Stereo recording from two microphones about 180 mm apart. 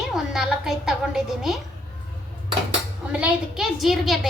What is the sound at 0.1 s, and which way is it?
A woman's voice, 5° right (ahead or behind).